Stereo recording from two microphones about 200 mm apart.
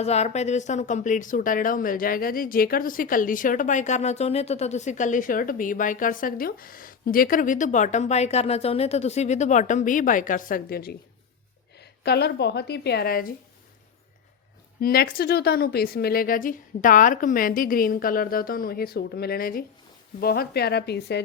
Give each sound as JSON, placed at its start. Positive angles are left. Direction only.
{"t": 0.0, "sound": "speech", "side_deg": 35}
{"t": 14.8, "sound": "a woman's voice", "side_deg": 50}